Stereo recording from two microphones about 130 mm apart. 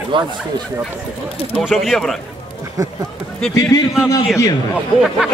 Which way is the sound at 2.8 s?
25° right (ahead or behind).